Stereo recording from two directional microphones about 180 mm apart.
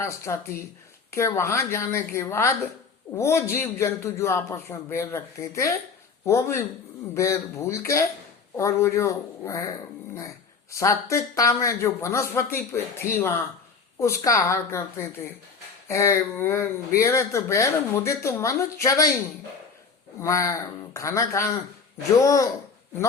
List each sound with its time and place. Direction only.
0.0 s speech: 15° left (ahead or behind)
20.1 s speech: 15° left (ahead or behind)